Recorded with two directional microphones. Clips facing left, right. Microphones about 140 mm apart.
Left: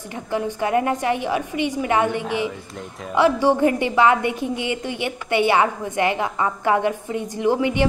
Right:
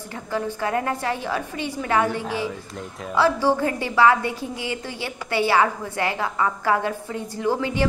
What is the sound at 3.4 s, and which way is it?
A woman's voice, 20° left (ahead or behind).